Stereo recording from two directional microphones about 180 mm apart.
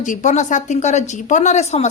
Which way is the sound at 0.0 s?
45° left (ahead or behind).